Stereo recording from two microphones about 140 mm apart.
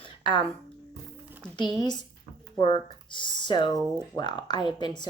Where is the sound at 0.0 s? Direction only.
35° left (ahead or behind).